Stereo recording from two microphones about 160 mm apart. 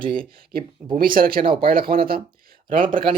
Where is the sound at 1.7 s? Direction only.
65° right (ahead or behind).